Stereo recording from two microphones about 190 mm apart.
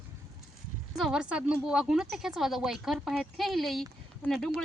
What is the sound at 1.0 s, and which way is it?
Speech, 5° right (ahead or behind).